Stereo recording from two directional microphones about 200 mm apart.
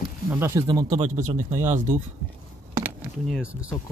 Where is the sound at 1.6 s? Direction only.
40° right (ahead or behind).